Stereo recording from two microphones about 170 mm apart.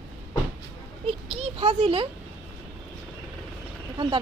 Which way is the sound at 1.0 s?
35° right (ahead or behind).